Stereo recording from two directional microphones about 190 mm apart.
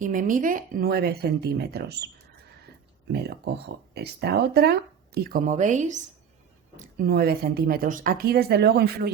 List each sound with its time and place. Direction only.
0.0 s speech: 45° right (ahead or behind)